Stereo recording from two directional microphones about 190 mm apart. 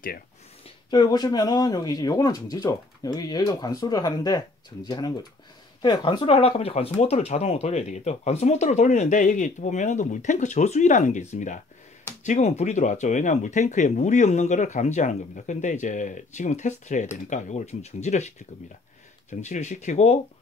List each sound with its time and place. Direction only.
0.8 s speech: 20° left (ahead or behind)
19.4 s speech: 40° left (ahead or behind)